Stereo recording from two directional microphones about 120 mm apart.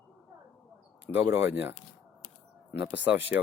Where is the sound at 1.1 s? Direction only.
20° right (ahead or behind).